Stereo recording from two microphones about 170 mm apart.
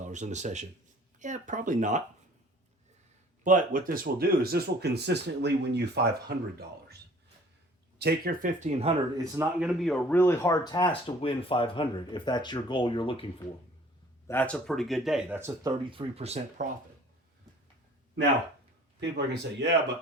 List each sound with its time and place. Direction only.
0.0 s speech: 45° right (ahead or behind)
3.4 s speech: 50° right (ahead or behind); by 6.9 s 70° right (ahead or behind)
7.9 s speech: 65° right (ahead or behind); by 8.9 s 45° right (ahead or behind)
8.9 s speech: 20° right (ahead or behind)
9.6 s speech: centre (ahead or behind); by 13.2 s 30° left (ahead or behind)
14.3 s speech: 10° left (ahead or behind)
15.4 s speech: 15° right (ahead or behind)
15.9 s speech: 35° right (ahead or behind)
18.9 s speech: 85° right